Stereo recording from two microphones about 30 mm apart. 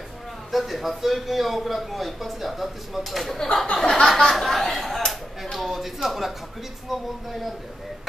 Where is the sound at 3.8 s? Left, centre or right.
Left.